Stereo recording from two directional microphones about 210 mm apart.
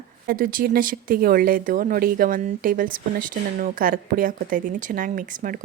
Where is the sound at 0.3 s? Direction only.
40° right (ahead or behind).